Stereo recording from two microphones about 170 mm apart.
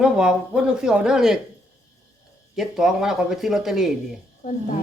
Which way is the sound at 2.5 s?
Centre (ahead or behind).